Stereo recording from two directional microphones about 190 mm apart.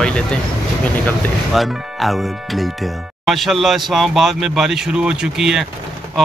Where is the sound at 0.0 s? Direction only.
5° left (ahead or behind).